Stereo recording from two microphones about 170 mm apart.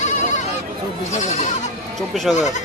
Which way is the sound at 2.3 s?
45° left (ahead or behind).